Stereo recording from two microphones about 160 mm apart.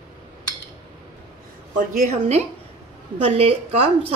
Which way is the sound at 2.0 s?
45° right (ahead or behind).